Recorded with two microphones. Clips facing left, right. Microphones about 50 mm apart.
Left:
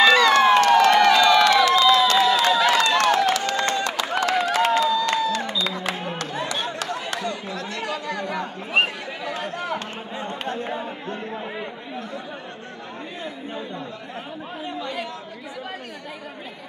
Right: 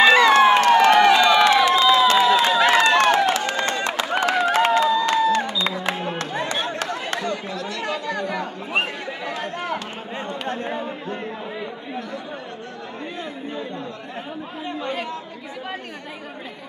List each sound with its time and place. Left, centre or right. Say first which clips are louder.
0.0 s crowd: right 2 dB; right
5.9 s a sound: right 2 dB; right
7.8 s chatter: right 3 dB; right
14.8 s chatter: right 3 dB; right